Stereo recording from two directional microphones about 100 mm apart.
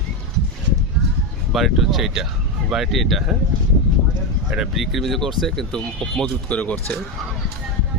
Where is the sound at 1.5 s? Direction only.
Centre (ahead or behind).